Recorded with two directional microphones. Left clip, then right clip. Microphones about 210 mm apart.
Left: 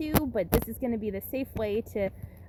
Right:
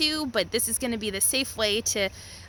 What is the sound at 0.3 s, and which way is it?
A woman's voice, 20° right (ahead or behind).